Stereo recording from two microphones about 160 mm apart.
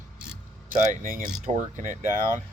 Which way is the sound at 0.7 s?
50° right (ahead or behind).